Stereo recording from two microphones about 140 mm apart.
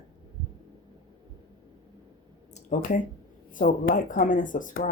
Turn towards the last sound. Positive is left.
turn(degrees=70)  # may be behind; listen again after turning